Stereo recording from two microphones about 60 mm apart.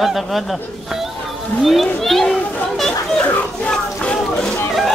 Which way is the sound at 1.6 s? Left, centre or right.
Centre.